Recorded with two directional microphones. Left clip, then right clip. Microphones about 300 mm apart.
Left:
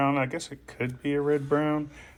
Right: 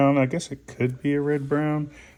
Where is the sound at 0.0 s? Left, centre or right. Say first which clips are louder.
Right 5 dB; right.